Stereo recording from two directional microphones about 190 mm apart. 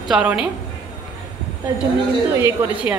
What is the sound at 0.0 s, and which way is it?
Speech, 5° right (ahead or behind).